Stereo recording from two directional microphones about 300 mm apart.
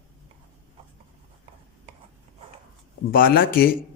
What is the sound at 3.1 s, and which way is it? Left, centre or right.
Speech, left.